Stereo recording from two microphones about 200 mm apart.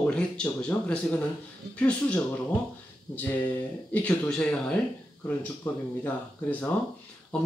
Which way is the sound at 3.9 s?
5° left (ahead or behind).